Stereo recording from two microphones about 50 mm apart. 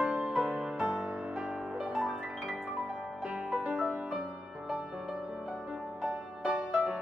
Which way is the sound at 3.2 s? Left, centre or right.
Centre.